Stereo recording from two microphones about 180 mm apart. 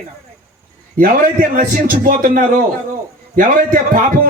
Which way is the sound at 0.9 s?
50° right (ahead or behind).